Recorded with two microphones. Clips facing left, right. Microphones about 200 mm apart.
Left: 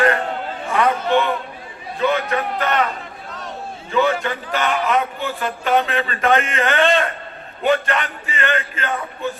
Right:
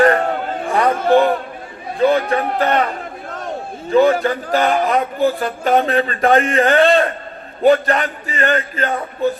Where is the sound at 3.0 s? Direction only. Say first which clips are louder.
Right 5 dB; 50° right (ahead or behind).